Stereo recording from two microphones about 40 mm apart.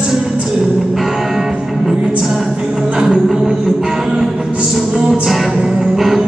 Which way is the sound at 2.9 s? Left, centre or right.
Right.